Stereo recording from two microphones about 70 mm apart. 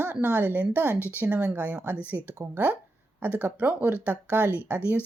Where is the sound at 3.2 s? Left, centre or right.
Right.